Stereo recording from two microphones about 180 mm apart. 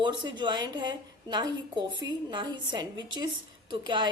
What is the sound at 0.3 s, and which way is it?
A woman's voice, 25° right (ahead or behind).